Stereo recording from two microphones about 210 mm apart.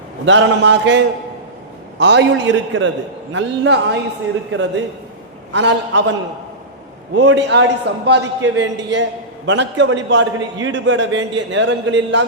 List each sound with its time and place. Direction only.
0.3 s a man's voice: 60° right (ahead or behind)
5.5 s a man's voice: 60° right (ahead or behind)